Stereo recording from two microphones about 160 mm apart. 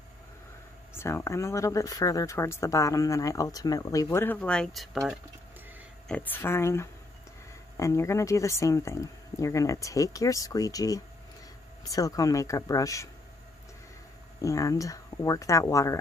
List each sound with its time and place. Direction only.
0.9 s speech: 15° left (ahead or behind); by 5.2 s centre (ahead or behind)
6.0 s speech: 10° left (ahead or behind)
14.4 s speech: 20° left (ahead or behind)